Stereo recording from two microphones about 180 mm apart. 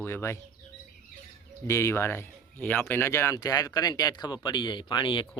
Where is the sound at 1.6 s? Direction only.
15° left (ahead or behind).